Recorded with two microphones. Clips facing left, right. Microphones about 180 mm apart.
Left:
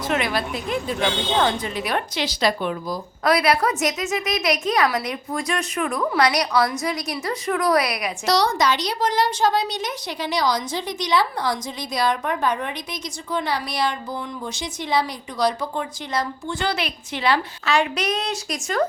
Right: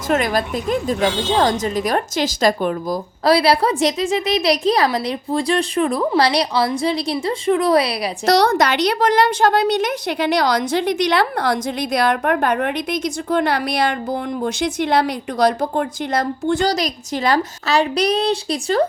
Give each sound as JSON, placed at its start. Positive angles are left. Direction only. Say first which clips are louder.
{"t": 0.1, "sound": "a woman's voice", "louder": "right 6 dB", "side_deg": -45}
{"t": 3.2, "sound": "a woman's voice", "louder": "right 4 dB", "side_deg": -30}
{"t": 8.3, "sound": "a woman's voice", "louder": "right 5 dB", "side_deg": -55}
{"t": 16.6, "sound": "a woman's voice", "louder": "right 6 dB", "side_deg": -40}